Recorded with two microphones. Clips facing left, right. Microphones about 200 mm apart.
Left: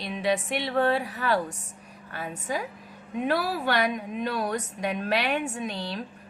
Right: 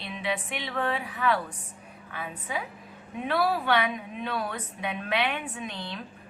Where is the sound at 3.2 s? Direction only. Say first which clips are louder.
Even; 40° left (ahead or behind).